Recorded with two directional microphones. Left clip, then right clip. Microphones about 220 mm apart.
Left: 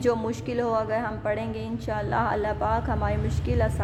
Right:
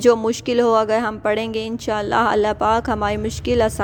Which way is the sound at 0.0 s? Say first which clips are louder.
Right 10 dB; 35° right (ahead or behind).